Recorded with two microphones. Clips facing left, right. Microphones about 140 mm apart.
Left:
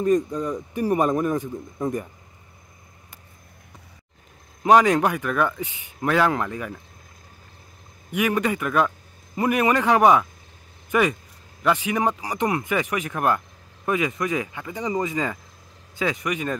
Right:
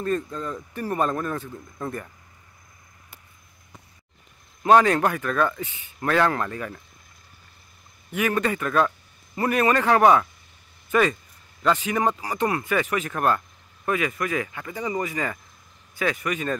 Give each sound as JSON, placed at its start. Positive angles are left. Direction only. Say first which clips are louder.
{"t": 0.0, "sound": "speech", "louder": "left 6 dB", "side_deg": 15}
{"t": 4.6, "sound": "speech", "louder": "left 1 dB", "side_deg": 15}
{"t": 8.1, "sound": "speech", "louder": "left 1 dB", "side_deg": 15}